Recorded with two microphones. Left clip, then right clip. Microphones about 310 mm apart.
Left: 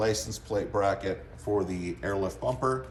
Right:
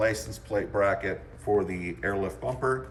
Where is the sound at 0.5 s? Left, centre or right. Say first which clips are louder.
Right 2 dB; centre.